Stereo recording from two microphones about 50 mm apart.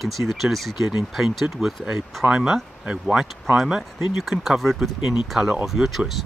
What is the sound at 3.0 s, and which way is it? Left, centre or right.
Speech, centre.